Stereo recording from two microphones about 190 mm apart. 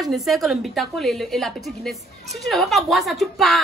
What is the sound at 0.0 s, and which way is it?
A woman's voice, centre (ahead or behind).